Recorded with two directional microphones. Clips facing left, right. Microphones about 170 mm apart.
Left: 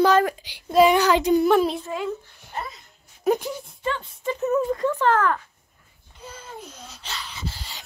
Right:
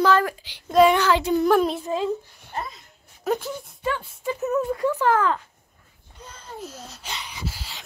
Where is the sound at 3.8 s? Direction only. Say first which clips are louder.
Even; 10° right (ahead or behind).